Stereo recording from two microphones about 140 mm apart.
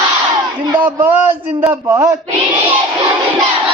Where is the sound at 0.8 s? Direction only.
10° right (ahead or behind).